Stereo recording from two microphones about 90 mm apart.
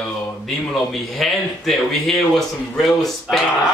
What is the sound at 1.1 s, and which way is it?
A man's voice, centre (ahead or behind).